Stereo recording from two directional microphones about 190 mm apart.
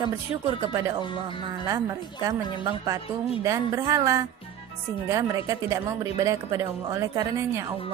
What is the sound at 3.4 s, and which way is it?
A woman's voice, 15° right (ahead or behind).